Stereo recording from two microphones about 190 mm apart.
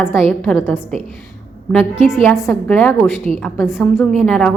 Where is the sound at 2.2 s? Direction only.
10° left (ahead or behind).